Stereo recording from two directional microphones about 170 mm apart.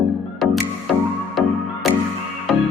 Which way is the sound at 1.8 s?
Centre (ahead or behind).